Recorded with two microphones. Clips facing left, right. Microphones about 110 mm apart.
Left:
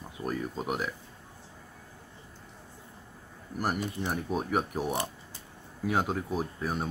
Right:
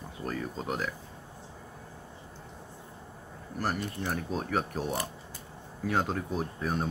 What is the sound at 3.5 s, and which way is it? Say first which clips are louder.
Speech: left 1 dB; 15° left (ahead or behind).